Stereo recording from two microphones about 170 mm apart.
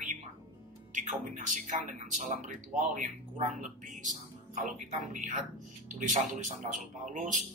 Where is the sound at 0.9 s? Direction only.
50° right (ahead or behind).